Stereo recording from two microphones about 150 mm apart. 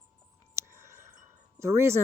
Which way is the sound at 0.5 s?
20° right (ahead or behind).